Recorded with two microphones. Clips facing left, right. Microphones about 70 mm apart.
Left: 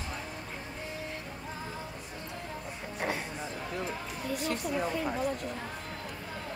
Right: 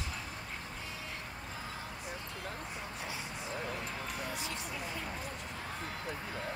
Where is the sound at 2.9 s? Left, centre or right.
Left.